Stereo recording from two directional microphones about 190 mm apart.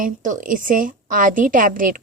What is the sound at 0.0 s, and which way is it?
A woman's voice, 45° right (ahead or behind).